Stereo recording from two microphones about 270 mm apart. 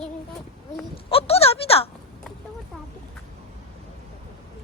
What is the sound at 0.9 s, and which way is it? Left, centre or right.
Speech, left.